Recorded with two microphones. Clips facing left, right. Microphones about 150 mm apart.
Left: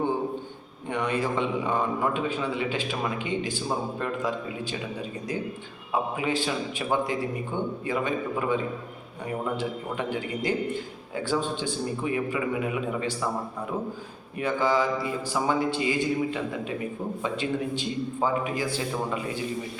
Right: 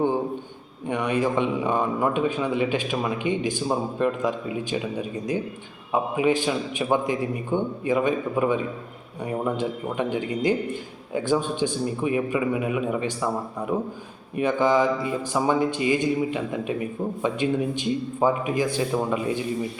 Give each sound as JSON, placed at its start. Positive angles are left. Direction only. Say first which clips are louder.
{"t": 0.9, "sound": "a man's voice", "louder": "right 4 dB", "side_deg": -15}
{"t": 9.6, "sound": "a man's voice", "louder": "right 4 dB", "side_deg": -20}
{"t": 14.3, "sound": "a man's voice", "louder": "right 4 dB", "side_deg": -20}